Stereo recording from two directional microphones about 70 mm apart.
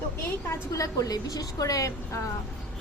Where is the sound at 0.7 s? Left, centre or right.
Left.